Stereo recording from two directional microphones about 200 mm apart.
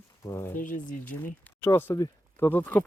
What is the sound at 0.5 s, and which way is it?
Speech, 40° left (ahead or behind).